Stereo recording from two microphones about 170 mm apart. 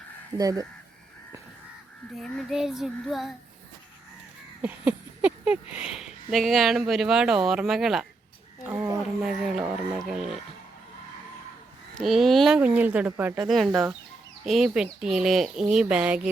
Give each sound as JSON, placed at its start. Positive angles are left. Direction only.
{"t": 0.3, "sound": "speech", "side_deg": -20}
{"t": 2.1, "sound": "speech", "side_deg": 0}
{"t": 4.6, "sound": "speech", "side_deg": -5}
{"t": 8.7, "sound": "a sound", "side_deg": -5}
{"t": 11.9, "sound": "speech", "side_deg": 0}
{"t": 14.4, "sound": "speech", "side_deg": 0}